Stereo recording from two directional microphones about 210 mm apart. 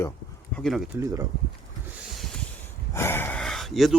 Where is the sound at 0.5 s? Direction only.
Centre (ahead or behind).